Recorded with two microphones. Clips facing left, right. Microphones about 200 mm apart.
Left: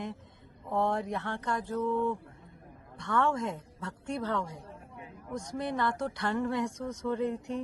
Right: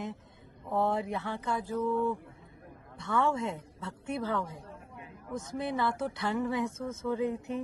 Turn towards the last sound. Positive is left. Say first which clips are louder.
# even
turn(degrees=-5)  # may be behind; listen again after turning